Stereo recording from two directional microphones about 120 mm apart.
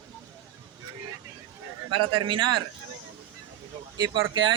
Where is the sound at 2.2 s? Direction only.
40° right (ahead or behind).